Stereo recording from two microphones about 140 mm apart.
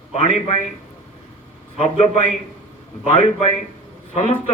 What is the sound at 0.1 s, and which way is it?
Speech, 50° left (ahead or behind).